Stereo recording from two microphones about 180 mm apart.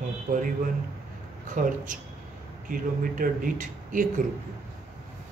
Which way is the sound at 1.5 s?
45° right (ahead or behind).